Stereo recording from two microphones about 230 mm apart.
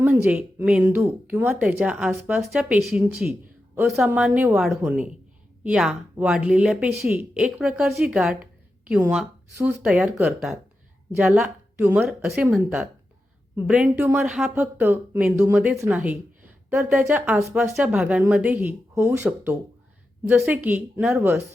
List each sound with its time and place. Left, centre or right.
0.0 s speech: centre